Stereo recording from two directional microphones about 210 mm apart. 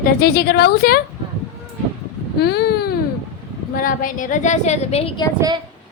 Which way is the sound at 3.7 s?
40° left (ahead or behind).